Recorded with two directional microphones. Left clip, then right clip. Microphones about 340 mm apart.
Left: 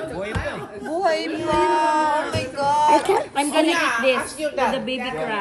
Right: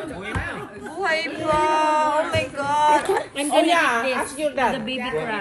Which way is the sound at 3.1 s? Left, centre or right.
Centre.